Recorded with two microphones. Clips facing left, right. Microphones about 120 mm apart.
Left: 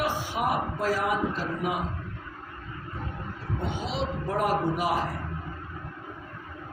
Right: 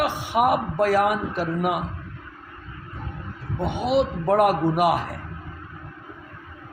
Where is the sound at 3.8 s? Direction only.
65° right (ahead or behind).